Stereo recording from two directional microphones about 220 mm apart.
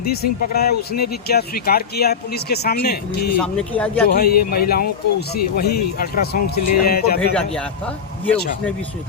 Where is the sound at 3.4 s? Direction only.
5° left (ahead or behind).